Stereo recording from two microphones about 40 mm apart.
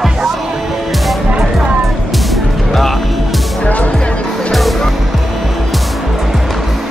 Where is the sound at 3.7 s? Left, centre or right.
Left.